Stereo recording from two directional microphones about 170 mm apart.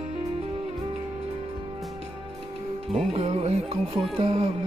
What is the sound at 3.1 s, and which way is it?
Music, 40° right (ahead or behind).